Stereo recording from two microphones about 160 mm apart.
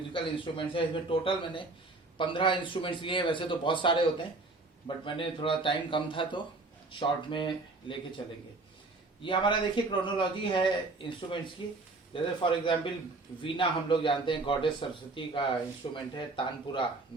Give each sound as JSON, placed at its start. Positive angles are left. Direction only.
{"t": 0.1, "sound": "a man's voice", "side_deg": 30}
{"t": 5.0, "sound": "a man's voice", "side_deg": 30}
{"t": 9.2, "sound": "a man's voice", "side_deg": 30}